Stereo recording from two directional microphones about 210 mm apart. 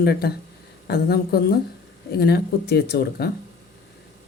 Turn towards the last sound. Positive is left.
turn(degrees=50)  # may be behind; listen again after turning